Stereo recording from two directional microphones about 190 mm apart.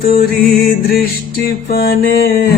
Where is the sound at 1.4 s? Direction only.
55° left (ahead or behind).